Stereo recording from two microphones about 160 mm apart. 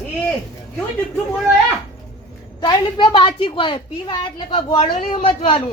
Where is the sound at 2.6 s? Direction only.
30° left (ahead or behind).